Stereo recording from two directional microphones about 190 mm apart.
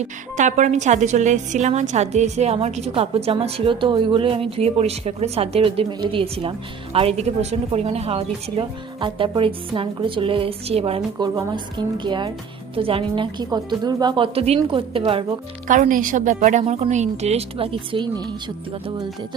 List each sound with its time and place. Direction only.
0.3 s a woman's voice: 40° right (ahead or behind)
11.3 s a woman's voice: 20° right (ahead or behind)
15.6 s a woman's voice: 45° right (ahead or behind); by 18.1 s 25° right (ahead or behind)